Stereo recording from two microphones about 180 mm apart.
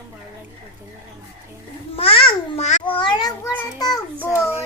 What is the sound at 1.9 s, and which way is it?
A child's voice, 30° left (ahead or behind).